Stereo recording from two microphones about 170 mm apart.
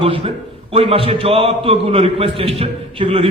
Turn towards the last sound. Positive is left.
turn(degrees=-30)  # may be behind; listen again after turning